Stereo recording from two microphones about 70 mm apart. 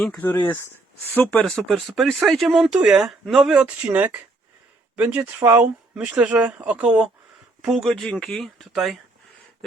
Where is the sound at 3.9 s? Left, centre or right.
Right.